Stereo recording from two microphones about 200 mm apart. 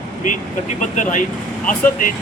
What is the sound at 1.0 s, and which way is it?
Speech, 40° left (ahead or behind).